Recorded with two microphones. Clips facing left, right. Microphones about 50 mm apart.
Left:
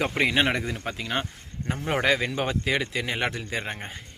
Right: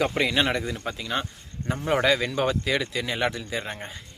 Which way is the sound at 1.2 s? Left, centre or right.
Left.